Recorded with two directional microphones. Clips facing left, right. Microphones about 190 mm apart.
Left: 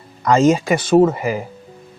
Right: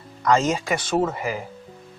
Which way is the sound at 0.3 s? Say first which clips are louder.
Left 7 dB; 10° left (ahead or behind).